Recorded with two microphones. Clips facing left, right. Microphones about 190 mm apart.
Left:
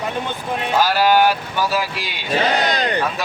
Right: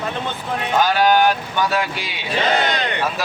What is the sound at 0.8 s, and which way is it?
Speech, 5° left (ahead or behind).